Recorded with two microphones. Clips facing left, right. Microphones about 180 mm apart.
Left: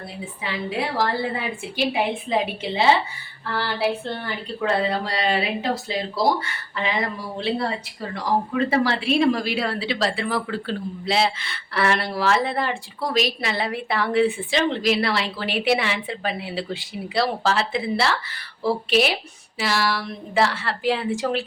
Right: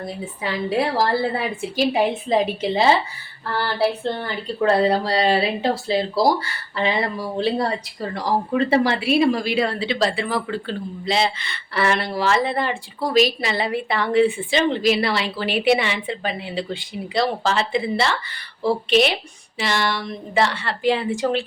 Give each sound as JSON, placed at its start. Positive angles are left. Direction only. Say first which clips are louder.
{"t": 0.4, "sound": "speech", "louder": "right 5 dB", "side_deg": -40}
{"t": 4.6, "sound": "speech", "louder": "right 5 dB", "side_deg": -40}